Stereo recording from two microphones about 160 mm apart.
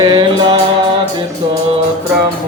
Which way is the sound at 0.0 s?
30° right (ahead or behind).